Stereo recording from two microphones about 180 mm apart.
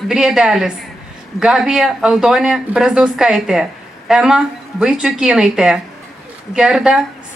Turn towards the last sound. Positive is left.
turn(degrees=-5)  # may be behind; listen again after turning